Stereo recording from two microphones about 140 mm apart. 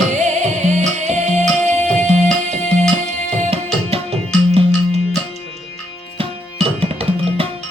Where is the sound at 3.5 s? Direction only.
45° right (ahead or behind).